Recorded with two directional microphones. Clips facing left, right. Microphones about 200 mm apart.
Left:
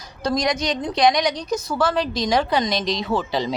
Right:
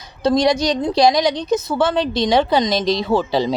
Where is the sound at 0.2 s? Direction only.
25° right (ahead or behind).